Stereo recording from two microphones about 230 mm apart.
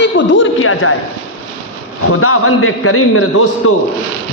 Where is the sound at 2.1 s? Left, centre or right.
Left.